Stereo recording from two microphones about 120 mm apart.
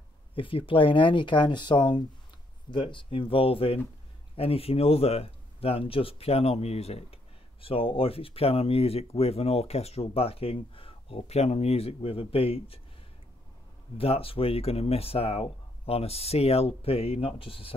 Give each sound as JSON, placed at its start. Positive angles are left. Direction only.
{"t": 0.3, "sound": "speech", "side_deg": 50}
{"t": 13.9, "sound": "speech", "side_deg": 50}